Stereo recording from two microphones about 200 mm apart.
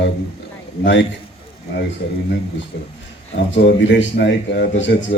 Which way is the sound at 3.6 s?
60° left (ahead or behind).